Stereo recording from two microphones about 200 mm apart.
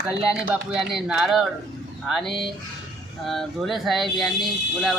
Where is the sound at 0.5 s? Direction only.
5° right (ahead or behind).